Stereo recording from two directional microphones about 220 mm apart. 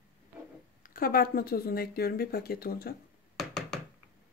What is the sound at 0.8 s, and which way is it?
Speech, 40° left (ahead or behind).